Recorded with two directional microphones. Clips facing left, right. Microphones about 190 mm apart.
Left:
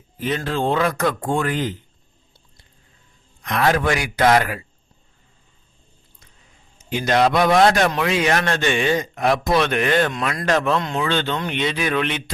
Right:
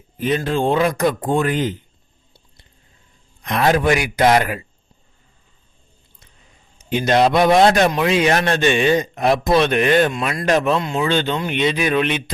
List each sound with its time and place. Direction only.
0.2 s speech: 15° right (ahead or behind)
3.4 s a man's voice: 20° right (ahead or behind)
6.7 s a man's voice: 20° right (ahead or behind)